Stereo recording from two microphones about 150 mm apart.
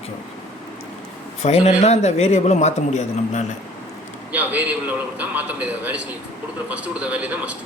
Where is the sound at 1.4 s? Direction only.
45° left (ahead or behind).